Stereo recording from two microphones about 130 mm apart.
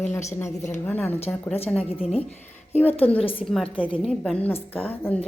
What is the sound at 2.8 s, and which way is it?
Speech, 15° left (ahead or behind).